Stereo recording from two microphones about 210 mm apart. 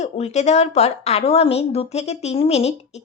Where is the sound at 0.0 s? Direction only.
30° left (ahead or behind).